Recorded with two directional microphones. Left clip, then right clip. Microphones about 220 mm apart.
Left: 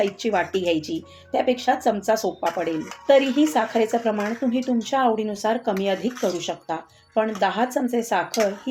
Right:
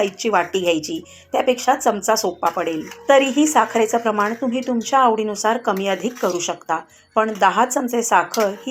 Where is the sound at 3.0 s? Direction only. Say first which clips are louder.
Right 3 dB; centre (ahead or behind).